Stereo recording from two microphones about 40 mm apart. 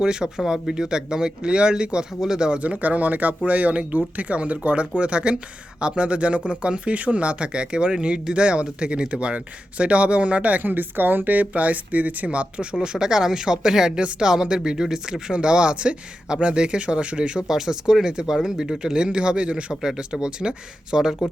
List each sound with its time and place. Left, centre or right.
0.0 s speech: centre
2.6 s speech: right
10.6 s speech: right
12.8 s speech: centre
17.5 s speech: centre